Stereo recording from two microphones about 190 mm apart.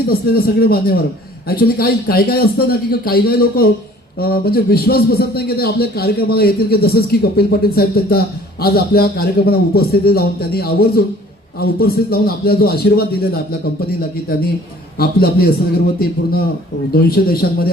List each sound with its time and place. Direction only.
0.1 s a man's voice: 55° left (ahead or behind)
14.9 s a man's voice: 55° left (ahead or behind)
16.9 s a man's voice: 55° left (ahead or behind)